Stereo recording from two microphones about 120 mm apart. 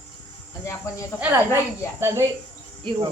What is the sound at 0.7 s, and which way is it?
Cricket, 25° left (ahead or behind).